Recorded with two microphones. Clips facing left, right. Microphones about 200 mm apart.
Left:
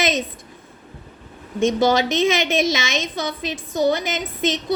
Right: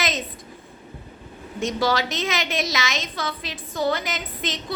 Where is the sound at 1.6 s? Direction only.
25° left (ahead or behind).